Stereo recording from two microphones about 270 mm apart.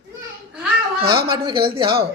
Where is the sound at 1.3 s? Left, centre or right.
Centre.